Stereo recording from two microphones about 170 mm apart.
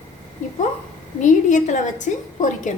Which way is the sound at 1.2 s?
45° left (ahead or behind).